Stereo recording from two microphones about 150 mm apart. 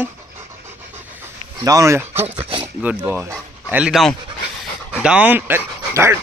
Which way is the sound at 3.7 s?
5° right (ahead or behind).